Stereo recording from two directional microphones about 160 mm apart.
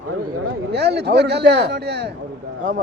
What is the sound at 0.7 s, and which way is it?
A man's voice, 90° right.